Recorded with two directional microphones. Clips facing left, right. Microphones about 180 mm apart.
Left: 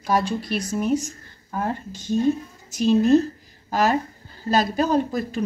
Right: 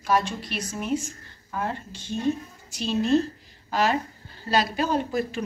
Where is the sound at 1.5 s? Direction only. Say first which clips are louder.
Left 3 dB; 40° left (ahead or behind).